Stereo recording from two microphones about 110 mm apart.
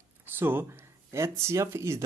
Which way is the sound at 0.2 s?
20° right (ahead or behind).